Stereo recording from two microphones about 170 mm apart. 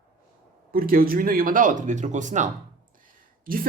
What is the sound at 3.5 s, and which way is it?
Speech, 55° right (ahead or behind).